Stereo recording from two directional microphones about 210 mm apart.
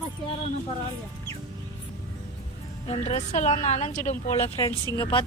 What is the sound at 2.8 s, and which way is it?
A woman's voice, 30° left (ahead or behind).